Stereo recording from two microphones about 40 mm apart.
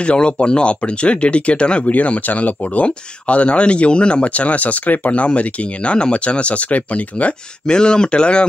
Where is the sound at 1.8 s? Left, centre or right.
Left.